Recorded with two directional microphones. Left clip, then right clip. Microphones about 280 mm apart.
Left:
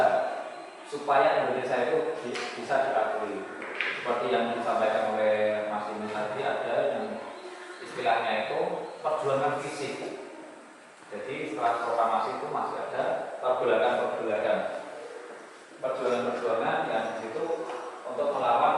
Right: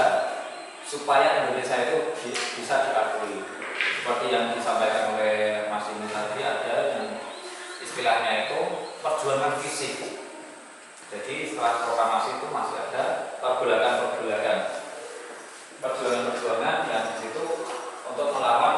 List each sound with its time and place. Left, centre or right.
0.0 s a sound: centre
1.1 s speech: centre
7.9 s speech: centre
11.3 s speech: centre
15.9 s speech: centre
18.2 s a man's voice: left